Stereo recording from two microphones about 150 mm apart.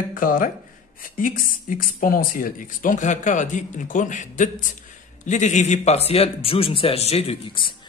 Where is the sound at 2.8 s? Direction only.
60° left (ahead or behind).